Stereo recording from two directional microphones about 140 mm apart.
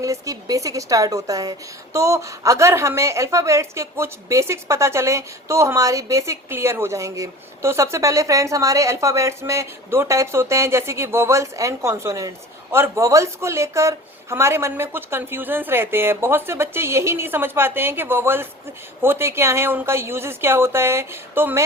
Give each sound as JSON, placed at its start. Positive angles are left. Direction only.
{"t": 0.0, "sound": "a woman's voice", "side_deg": -25}